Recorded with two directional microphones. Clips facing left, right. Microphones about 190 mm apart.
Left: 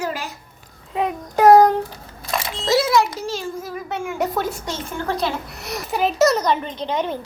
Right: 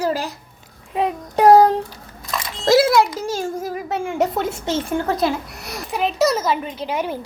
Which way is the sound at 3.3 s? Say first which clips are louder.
Right 4 dB; 40° right (ahead or behind).